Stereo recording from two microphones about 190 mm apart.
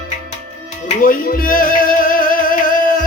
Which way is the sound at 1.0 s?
50° left (ahead or behind).